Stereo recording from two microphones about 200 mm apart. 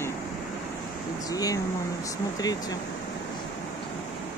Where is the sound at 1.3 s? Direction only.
15° left (ahead or behind).